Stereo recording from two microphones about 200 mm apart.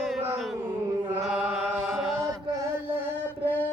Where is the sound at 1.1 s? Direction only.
Centre (ahead or behind).